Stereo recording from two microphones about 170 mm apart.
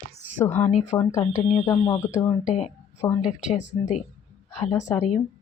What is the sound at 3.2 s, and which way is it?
Speech, 45° left (ahead or behind).